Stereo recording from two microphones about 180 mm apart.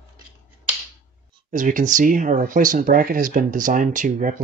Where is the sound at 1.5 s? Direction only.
45° right (ahead or behind).